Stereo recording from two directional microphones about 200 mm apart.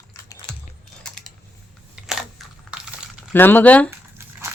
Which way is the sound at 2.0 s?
Centre (ahead or behind).